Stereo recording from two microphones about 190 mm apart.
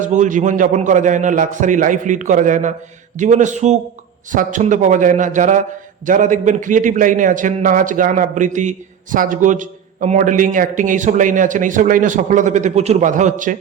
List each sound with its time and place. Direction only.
0.0 s a man's voice: 40° right (ahead or behind)